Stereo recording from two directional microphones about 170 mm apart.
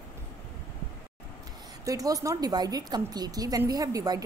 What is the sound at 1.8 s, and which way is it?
A woman's voice, 20° right (ahead or behind).